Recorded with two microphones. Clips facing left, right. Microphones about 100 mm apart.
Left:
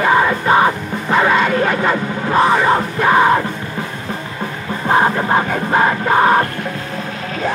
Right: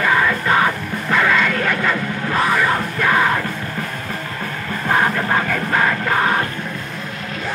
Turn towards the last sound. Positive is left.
turn(degrees=30)  # may be behind; listen again after turning